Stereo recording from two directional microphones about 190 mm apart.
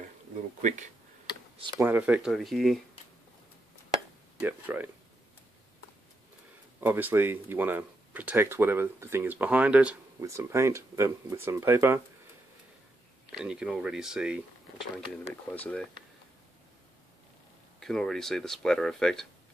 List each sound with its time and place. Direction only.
0.6 s speech: 40° right (ahead or behind)
1.8 s speech: 10° right (ahead or behind)
4.4 s speech: 10° right (ahead or behind)
6.8 s speech: 10° right (ahead or behind)
13.3 s speech: 5° right (ahead or behind)
15.5 s speech: 5° left (ahead or behind)
17.7 s speech: centre (ahead or behind)